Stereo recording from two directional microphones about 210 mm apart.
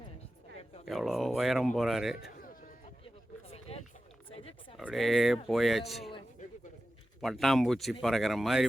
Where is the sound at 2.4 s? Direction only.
40° left (ahead or behind).